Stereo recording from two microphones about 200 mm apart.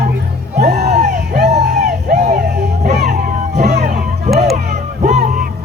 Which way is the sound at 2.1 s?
40° right (ahead or behind).